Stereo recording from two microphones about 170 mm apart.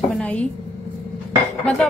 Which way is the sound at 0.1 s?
5° left (ahead or behind).